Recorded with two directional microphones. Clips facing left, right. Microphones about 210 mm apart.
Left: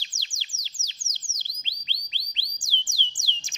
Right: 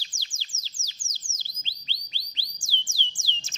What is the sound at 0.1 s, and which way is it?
Bird, 20° left (ahead or behind).